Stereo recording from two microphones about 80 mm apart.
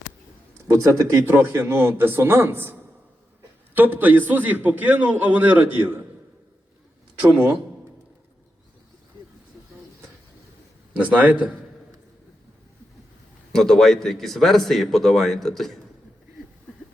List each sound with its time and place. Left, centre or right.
0.7 s a man's voice: right
3.8 s a man's voice: right
10.9 s a man's voice: centre
13.5 s a man's voice: centre